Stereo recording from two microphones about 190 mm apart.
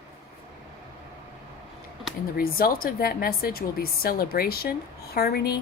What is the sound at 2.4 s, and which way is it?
Speech, 50° left (ahead or behind).